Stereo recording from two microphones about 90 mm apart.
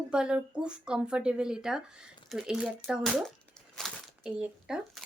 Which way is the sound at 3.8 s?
Centre (ahead or behind).